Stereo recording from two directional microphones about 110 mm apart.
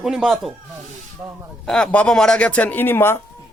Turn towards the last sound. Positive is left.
turn(degrees=20)  # may be behind; listen again after turning